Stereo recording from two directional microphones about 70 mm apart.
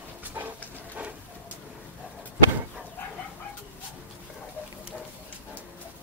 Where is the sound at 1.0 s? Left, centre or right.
Centre.